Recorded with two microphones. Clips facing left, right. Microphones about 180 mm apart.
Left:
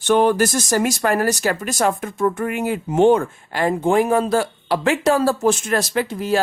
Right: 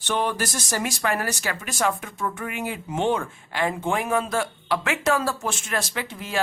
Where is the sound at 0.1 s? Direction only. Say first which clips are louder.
Left 10 dB; 50° left (ahead or behind).